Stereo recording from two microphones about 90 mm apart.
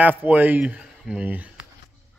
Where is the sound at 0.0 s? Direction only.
20° right (ahead or behind).